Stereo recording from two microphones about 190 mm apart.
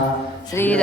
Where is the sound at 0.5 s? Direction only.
10° left (ahead or behind).